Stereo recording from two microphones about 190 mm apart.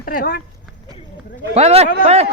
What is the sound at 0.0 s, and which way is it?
Speech, 50° left (ahead or behind).